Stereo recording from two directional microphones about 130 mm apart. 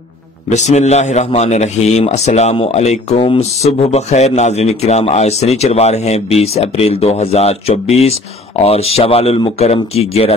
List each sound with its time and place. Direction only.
0.5 s speech: 60° left (ahead or behind)